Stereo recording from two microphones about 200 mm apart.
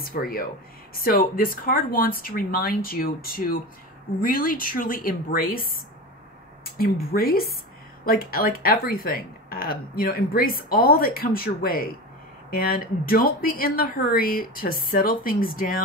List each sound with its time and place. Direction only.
0.0 s speech: 50° left (ahead or behind)